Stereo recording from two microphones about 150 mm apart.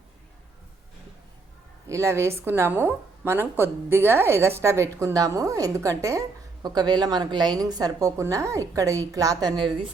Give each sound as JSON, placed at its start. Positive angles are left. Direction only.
{"t": 1.9, "sound": "a woman's voice", "side_deg": -20}